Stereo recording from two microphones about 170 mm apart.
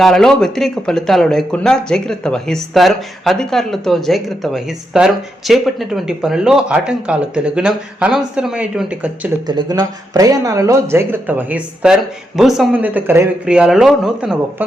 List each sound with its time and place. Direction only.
0.0 s speech: centre (ahead or behind)
9.5 s speech: 25° right (ahead or behind); by 14.3 s 5° right (ahead or behind)